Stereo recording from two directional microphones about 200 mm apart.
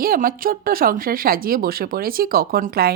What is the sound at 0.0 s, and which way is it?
Speech, 45° right (ahead or behind).